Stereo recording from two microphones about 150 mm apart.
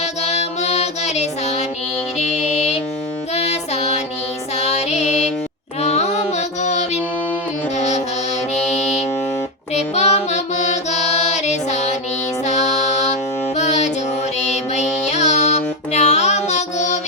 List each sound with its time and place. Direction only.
0.0 s music: 45° left (ahead or behind)